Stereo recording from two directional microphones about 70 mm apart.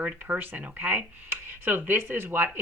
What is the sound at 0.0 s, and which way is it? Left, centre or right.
Speech, right.